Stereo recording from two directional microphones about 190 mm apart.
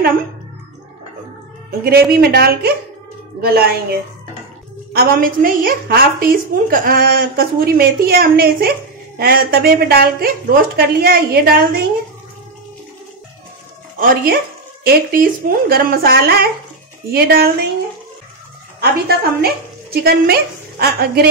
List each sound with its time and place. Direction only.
1.9 s a woman's voice: 50° right (ahead or behind)
4.9 s a woman's voice: 50° right (ahead or behind)
13.9 s a woman's voice: 50° right (ahead or behind)
18.8 s speech: 55° right (ahead or behind)